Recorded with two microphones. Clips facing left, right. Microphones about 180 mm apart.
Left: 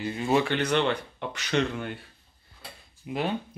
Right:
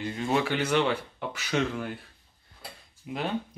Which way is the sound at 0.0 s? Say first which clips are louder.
Left 2 dB; 5° left (ahead or behind).